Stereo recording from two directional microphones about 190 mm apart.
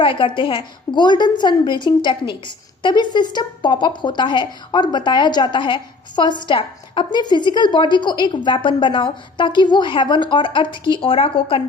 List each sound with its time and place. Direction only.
0.0 s a woman's voice: 25° left (ahead or behind)